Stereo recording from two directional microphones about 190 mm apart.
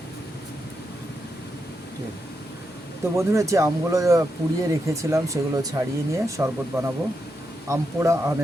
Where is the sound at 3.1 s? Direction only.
15° right (ahead or behind).